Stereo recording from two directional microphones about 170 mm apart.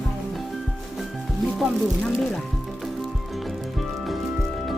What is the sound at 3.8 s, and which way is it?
Music, centre (ahead or behind).